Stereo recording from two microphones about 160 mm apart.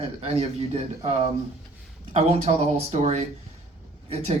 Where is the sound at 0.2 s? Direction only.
40° right (ahead or behind).